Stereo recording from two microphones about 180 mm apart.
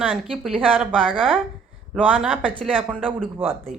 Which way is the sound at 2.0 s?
5° right (ahead or behind).